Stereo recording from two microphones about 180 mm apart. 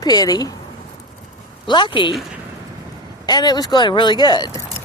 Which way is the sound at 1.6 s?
25° left (ahead or behind).